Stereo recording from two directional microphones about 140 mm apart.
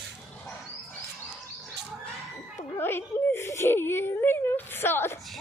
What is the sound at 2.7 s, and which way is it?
Whimper, 15° left (ahead or behind).